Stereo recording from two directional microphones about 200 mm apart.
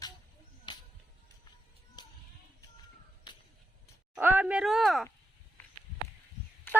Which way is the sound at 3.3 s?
20° left (ahead or behind).